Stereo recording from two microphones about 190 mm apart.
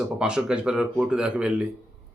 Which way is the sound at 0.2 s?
5° right (ahead or behind).